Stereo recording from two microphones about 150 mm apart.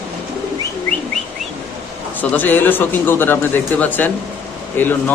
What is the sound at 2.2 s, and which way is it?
Speech, 10° left (ahead or behind).